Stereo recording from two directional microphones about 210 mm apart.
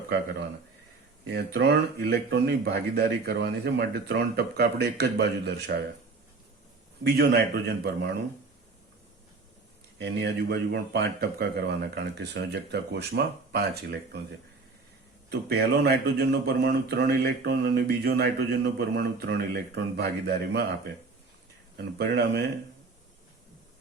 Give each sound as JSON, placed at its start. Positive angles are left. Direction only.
{"t": 1.3, "sound": "speech", "side_deg": -50}
{"t": 7.0, "sound": "speech", "side_deg": -50}
{"t": 10.0, "sound": "speech", "side_deg": -55}
{"t": 21.9, "sound": "speech", "side_deg": -50}